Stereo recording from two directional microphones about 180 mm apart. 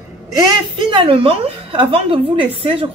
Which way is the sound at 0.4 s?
25° right (ahead or behind).